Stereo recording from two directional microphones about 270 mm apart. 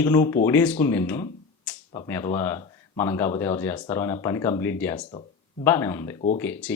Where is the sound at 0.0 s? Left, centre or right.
Centre.